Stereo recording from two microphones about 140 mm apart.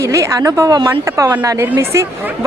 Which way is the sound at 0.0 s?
20° right (ahead or behind).